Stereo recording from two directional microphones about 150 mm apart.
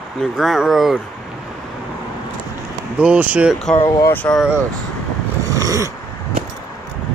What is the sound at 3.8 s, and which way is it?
Speech, 15° left (ahead or behind).